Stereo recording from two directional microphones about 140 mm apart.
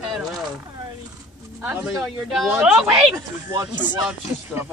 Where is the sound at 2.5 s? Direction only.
15° right (ahead or behind).